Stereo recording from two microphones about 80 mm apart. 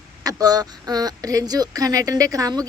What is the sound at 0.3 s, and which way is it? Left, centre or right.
Speech, right.